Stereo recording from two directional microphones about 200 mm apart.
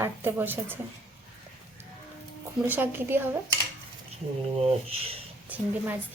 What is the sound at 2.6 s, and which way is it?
Speech, 10° right (ahead or behind).